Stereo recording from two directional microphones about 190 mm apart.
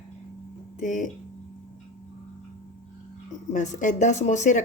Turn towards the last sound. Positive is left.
turn(degrees=40)  # may be behind; listen again after turning